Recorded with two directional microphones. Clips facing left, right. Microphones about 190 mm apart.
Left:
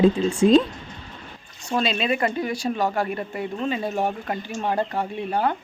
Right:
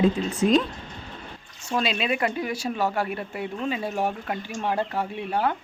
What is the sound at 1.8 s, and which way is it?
Speech, 5° right (ahead or behind).